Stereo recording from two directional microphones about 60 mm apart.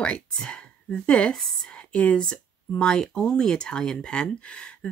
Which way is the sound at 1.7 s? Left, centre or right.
Centre.